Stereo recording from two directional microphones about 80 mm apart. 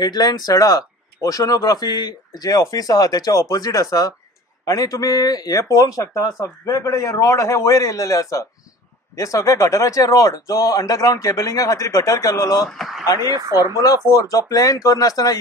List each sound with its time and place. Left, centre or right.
0.0 s a man's voice: left
12.6 s speech: centre
13.2 s speech: right
13.7 s a man's voice: left